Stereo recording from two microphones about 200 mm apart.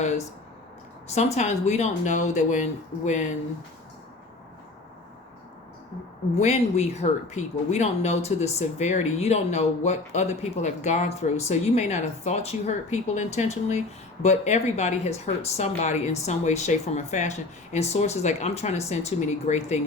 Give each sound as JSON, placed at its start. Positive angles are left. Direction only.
{"t": 0.0, "sound": "a sound", "side_deg": 35}
{"t": 1.0, "sound": "speech", "side_deg": 35}
{"t": 6.4, "sound": "speech", "side_deg": 35}